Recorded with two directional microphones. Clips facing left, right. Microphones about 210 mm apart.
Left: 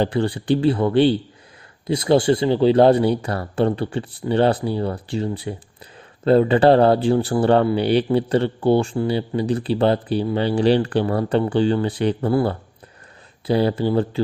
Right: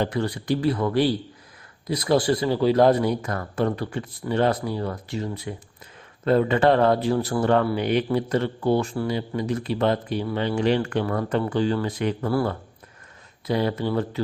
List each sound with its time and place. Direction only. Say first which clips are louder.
0.0 s a man's voice: left 4 dB; 30° left (ahead or behind)